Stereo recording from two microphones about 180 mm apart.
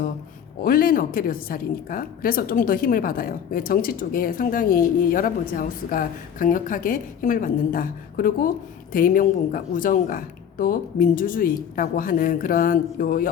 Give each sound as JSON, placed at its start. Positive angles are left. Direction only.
{"t": 0.6, "sound": "a woman's voice", "side_deg": 50}